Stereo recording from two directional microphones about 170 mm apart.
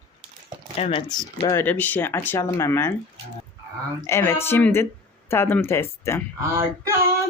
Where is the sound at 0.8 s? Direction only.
35° left (ahead or behind).